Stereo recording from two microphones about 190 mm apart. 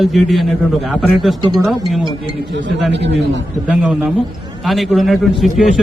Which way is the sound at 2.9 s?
65° right (ahead or behind).